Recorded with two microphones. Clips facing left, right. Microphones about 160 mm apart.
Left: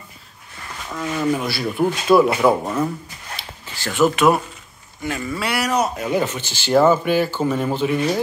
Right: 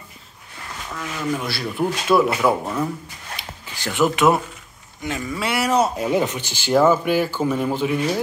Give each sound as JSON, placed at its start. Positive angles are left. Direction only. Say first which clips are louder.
{"t": 0.8, "sound": "speech", "louder": "left 5 dB", "side_deg": 15}
{"t": 3.7, "sound": "speech", "louder": "left 2 dB", "side_deg": -15}
{"t": 6.1, "sound": "speech", "louder": "even", "side_deg": -15}